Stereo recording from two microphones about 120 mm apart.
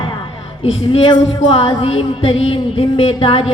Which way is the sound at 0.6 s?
55° left (ahead or behind).